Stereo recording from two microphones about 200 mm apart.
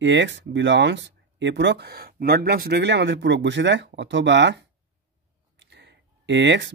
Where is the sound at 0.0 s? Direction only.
65° right (ahead or behind).